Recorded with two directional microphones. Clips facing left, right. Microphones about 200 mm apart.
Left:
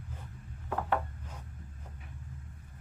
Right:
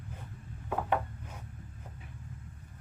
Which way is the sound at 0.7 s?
10° right (ahead or behind).